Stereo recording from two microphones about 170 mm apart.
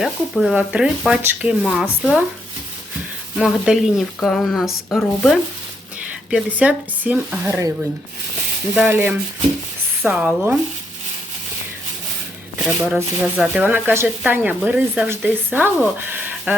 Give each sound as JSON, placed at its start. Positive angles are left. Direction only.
{"t": 0.0, "sound": "speech", "side_deg": 0}
{"t": 3.3, "sound": "speech", "side_deg": 0}
{"t": 8.7, "sound": "speech", "side_deg": -10}
{"t": 12.5, "sound": "speech", "side_deg": 0}